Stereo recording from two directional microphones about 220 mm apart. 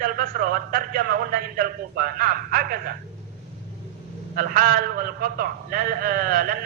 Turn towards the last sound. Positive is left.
turn(degrees=-40)  # may be behind; listen again after turning